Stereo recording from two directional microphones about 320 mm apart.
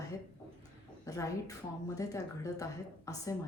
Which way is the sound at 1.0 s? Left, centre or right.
Centre.